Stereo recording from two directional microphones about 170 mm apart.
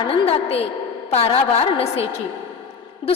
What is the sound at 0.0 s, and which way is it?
A woman's voice, 30° left (ahead or behind).